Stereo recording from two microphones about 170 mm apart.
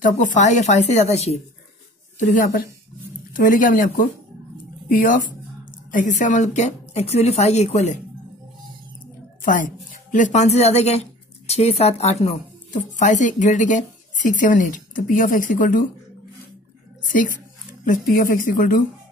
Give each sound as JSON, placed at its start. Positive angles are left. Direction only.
{"t": 0.0, "sound": "a woman's voice", "side_deg": 45}
{"t": 9.4, "sound": "a woman's voice", "side_deg": 50}
{"t": 18.1, "sound": "a woman's voice", "side_deg": 55}